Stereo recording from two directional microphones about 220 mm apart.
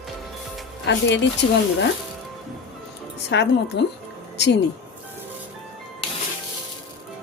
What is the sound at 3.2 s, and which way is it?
Speech, 50° left (ahead or behind).